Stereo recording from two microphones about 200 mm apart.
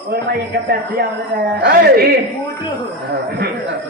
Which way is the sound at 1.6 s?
50° right (ahead or behind).